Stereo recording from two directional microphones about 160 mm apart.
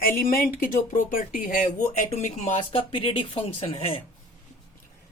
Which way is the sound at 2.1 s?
35° left (ahead or behind).